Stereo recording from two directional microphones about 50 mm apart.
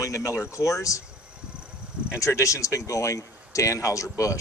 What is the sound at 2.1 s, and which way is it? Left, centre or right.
Speech, left.